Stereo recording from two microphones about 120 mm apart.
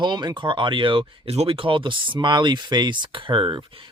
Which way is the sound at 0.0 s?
35° right (ahead or behind).